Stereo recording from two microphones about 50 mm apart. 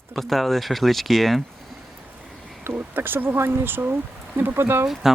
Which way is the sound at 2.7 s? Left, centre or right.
Right.